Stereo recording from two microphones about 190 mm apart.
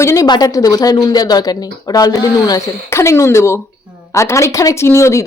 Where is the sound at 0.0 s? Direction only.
15° left (ahead or behind).